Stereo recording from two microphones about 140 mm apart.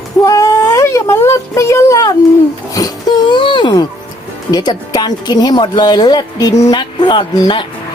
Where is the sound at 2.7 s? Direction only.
25° left (ahead or behind).